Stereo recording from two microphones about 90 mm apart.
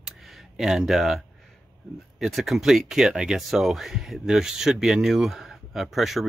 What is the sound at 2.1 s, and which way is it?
Speech, centre (ahead or behind).